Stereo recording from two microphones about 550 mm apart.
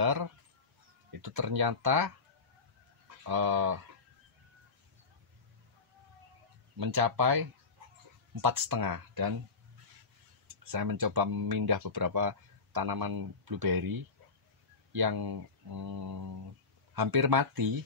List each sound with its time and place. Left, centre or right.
0.0 s speech: right
3.3 s speech: right
6.8 s speech: right
10.7 s speech: right